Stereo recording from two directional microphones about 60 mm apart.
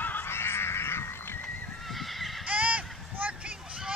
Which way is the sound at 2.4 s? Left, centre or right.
Right.